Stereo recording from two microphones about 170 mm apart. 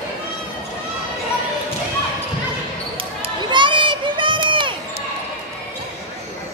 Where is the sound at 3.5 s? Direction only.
30° right (ahead or behind).